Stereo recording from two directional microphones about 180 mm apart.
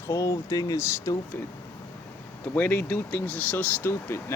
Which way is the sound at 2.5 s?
10° left (ahead or behind).